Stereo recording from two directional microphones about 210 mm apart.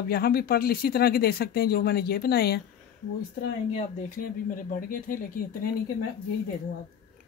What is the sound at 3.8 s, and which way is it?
Speech, 40° left (ahead or behind).